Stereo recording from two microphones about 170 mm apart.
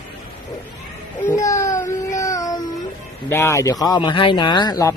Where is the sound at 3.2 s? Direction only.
15° left (ahead or behind).